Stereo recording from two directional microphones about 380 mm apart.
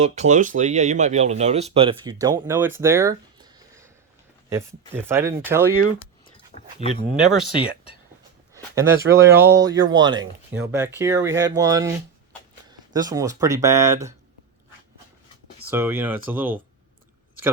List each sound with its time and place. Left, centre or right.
0.0 s speech: centre
6.5 s dog: centre
7.2 s speech: centre
15.7 s speech: centre